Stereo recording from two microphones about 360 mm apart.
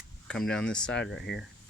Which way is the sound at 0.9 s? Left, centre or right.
Left.